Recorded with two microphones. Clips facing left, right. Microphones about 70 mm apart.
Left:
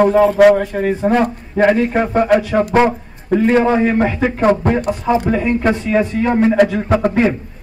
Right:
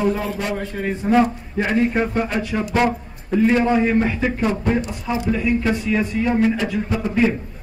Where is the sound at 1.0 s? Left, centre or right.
Left.